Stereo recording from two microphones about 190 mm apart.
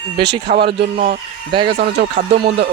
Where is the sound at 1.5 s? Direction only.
25° right (ahead or behind).